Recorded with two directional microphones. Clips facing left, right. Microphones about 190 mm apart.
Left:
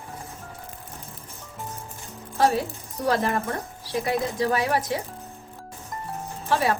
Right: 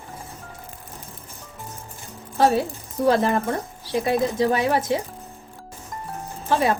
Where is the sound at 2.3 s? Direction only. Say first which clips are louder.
Right 3 dB; 25° right (ahead or behind).